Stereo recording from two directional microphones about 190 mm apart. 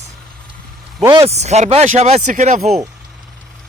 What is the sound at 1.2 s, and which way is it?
Speech, 35° right (ahead or behind).